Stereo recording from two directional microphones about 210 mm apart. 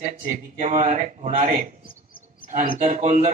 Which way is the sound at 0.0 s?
35° right (ahead or behind).